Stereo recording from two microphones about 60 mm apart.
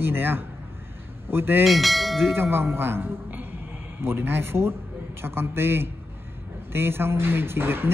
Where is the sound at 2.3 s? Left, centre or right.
Right.